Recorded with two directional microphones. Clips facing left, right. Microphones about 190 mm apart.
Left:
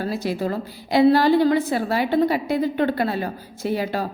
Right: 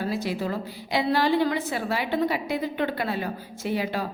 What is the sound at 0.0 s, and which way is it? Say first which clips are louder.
A woman's voice: left 3 dB; 40° left (ahead or behind).